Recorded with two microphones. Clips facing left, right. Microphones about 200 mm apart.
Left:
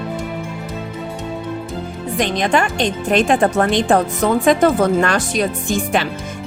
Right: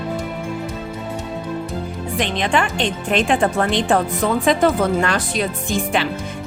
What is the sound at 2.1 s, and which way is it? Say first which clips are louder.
Speech: left 3 dB; 40° left (ahead or behind).